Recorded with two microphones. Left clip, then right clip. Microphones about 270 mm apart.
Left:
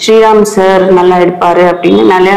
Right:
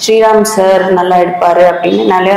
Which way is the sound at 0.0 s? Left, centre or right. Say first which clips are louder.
Left 2 dB; left.